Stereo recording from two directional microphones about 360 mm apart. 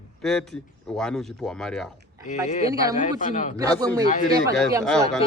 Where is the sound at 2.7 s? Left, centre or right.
Centre.